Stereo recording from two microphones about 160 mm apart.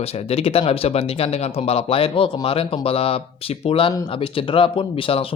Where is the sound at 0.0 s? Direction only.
40° left (ahead or behind).